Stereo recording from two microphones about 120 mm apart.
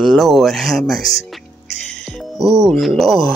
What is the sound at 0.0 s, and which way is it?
Speech, centre (ahead or behind).